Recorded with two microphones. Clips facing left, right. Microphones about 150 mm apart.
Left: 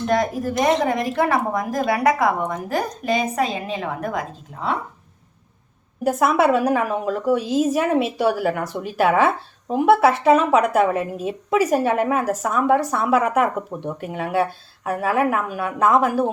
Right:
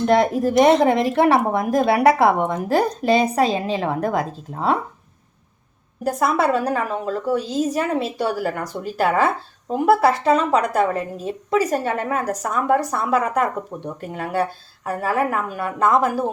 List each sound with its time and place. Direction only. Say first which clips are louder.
0.1 s a woman's voice: right 4 dB; 25° right (ahead or behind)
6.0 s a woman's voice: left 2 dB; 5° left (ahead or behind)